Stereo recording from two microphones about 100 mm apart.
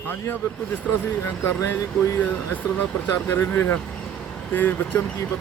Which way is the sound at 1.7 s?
30° left (ahead or behind).